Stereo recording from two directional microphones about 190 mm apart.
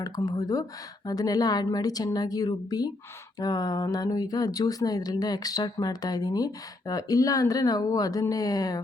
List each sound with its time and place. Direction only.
0.0 s speech: 20° left (ahead or behind)